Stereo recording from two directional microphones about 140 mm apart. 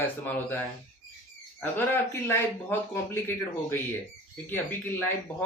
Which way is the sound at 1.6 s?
15° left (ahead or behind).